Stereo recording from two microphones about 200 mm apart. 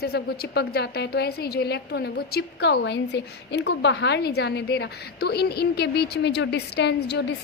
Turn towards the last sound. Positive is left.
turn(degrees=60)  # may be behind; listen again after turning